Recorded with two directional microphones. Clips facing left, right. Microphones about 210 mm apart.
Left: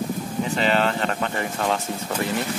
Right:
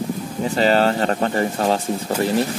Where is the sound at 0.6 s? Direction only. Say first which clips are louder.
Right 6 dB; 40° right (ahead or behind).